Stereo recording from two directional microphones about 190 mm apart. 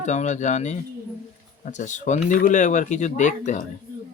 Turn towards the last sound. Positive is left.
turn(degrees=40)  # may be behind; listen again after turning